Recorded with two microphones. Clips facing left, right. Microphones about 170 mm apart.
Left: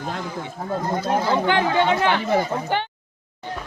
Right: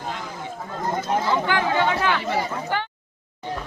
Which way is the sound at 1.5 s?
25° left (ahead or behind).